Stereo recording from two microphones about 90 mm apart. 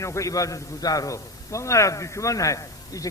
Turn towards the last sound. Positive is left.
turn(degrees=40)  # may be behind; listen again after turning